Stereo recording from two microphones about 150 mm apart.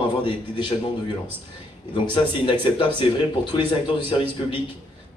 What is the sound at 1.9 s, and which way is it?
A man's voice, 35° left (ahead or behind).